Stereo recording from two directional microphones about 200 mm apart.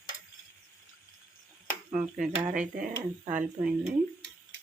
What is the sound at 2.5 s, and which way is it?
Speech, 5° right (ahead or behind).